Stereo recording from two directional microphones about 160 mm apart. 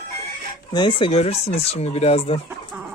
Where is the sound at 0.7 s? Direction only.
30° left (ahead or behind).